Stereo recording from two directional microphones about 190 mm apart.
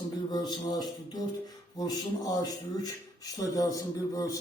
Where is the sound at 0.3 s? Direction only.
20° left (ahead or behind).